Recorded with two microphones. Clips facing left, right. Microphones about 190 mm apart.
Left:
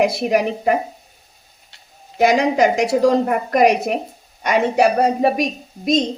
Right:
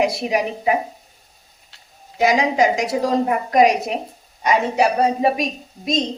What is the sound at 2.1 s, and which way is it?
A woman's voice, 55° left (ahead or behind).